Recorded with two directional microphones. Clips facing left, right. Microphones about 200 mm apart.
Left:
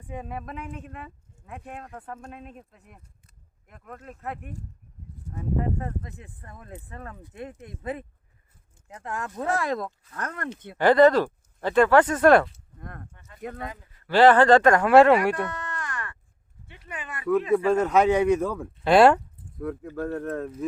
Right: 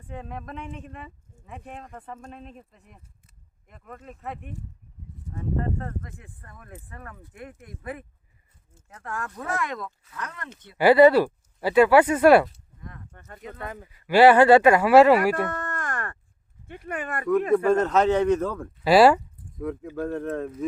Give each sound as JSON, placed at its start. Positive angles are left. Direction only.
{"t": 0.1, "sound": "speech", "side_deg": 10}
{"t": 10.2, "sound": "speech", "side_deg": 50}
{"t": 10.8, "sound": "speech", "side_deg": -10}
{"t": 12.8, "sound": "speech", "side_deg": 55}
{"t": 13.1, "sound": "speech", "side_deg": -50}
{"t": 14.1, "sound": "speech", "side_deg": -10}
{"t": 15.4, "sound": "a sound", "side_deg": -50}
{"t": 16.6, "sound": "speech", "side_deg": -50}
{"t": 17.7, "sound": "a man's voice", "side_deg": 10}
{"t": 18.9, "sound": "speech", "side_deg": -5}